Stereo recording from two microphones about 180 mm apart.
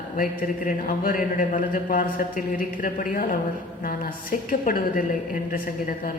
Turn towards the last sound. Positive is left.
turn(degrees=50)  # may be behind; listen again after turning